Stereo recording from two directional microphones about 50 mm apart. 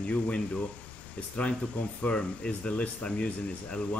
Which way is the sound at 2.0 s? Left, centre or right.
Left.